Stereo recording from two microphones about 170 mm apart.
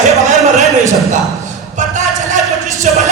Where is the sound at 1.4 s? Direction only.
45° right (ahead or behind).